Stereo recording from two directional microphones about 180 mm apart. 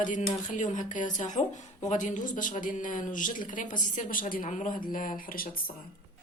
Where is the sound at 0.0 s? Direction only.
45° left (ahead or behind).